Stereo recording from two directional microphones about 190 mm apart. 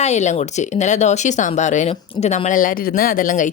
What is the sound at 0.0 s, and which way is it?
A woman's voice, 35° left (ahead or behind).